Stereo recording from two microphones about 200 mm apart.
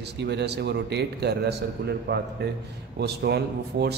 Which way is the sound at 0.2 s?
55° right (ahead or behind).